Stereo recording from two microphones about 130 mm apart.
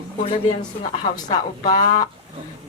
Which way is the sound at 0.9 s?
35° left (ahead or behind).